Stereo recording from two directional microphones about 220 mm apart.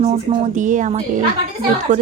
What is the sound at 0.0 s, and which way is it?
Speech, 30° right (ahead or behind).